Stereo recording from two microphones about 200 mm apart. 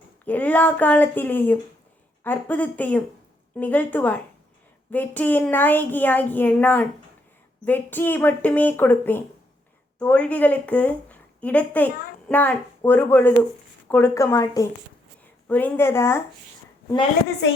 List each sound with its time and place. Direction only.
0.3 s a woman's voice: 10° left (ahead or behind)